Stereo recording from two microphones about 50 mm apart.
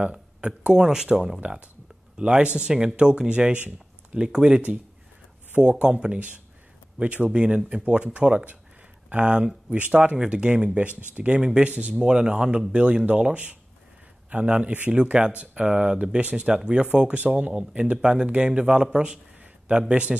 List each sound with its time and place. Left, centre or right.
0.1 s speech: centre
1.4 s speech: right
5.6 s speech: right